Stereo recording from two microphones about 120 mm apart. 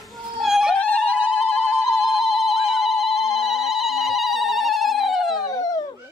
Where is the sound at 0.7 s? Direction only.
10° left (ahead or behind).